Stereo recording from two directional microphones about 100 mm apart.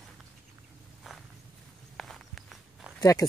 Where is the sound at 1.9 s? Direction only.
5° left (ahead or behind).